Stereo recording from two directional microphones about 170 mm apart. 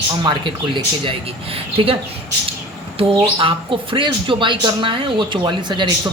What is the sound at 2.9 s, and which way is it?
Speech, 30° right (ahead or behind).